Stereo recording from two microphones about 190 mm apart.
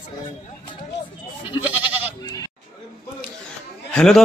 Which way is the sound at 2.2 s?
20° left (ahead or behind).